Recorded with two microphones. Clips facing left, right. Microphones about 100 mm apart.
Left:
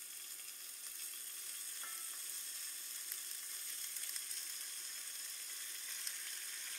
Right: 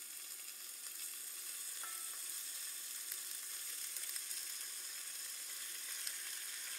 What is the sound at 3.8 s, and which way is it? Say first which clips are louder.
Frying: right 1 dB; centre (ahead or behind).